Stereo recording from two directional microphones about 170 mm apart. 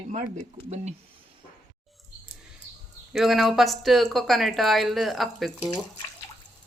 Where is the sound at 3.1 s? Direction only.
Centre (ahead or behind).